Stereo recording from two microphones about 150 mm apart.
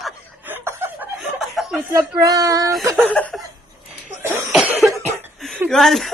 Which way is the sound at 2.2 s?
25° right (ahead or behind).